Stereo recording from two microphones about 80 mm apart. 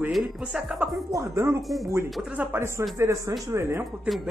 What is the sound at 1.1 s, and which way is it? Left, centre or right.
Speech, right.